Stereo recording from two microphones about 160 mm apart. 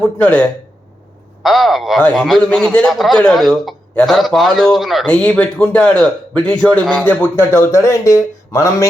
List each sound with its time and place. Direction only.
0.0 s a man's voice: 10° left (ahead or behind)